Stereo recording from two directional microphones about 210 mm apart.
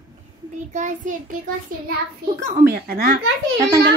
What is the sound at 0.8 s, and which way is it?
Speech, 35° right (ahead or behind).